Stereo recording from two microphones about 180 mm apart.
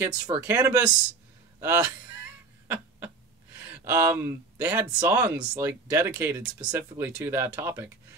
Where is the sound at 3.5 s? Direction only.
10° right (ahead or behind).